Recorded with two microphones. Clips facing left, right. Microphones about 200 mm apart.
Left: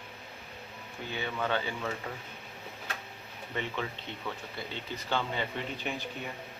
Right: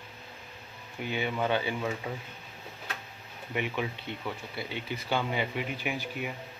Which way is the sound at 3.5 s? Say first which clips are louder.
Right 3 dB; 15° right (ahead or behind).